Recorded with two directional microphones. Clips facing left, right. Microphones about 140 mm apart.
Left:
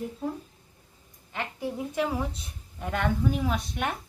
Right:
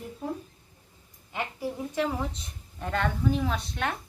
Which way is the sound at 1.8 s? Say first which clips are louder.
Left 1 dB; 5° left (ahead or behind).